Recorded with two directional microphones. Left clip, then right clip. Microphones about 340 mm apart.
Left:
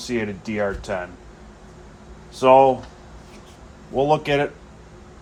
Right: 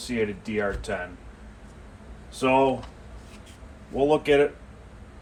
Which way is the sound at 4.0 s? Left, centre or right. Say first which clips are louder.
Left 1 dB; left.